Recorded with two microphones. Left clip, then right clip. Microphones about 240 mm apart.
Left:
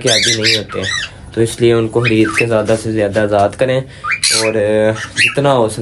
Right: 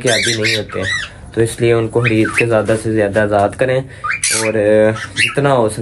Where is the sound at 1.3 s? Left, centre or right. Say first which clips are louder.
Left 1 dB; centre.